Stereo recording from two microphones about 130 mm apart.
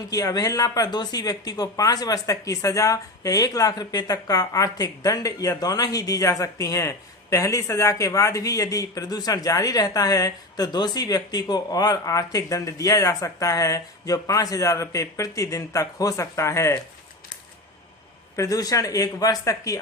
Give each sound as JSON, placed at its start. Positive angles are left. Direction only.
{"t": 0.1, "sound": "a woman's voice", "side_deg": 25}
{"t": 18.3, "sound": "a woman's voice", "side_deg": 25}